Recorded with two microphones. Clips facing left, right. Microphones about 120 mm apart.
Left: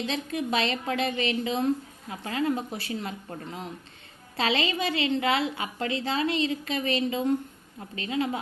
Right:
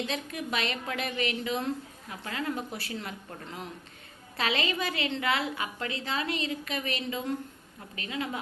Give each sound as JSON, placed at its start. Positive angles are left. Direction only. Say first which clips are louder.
{"t": 0.1, "sound": "a woman's voice", "louder": "left 5 dB", "side_deg": 30}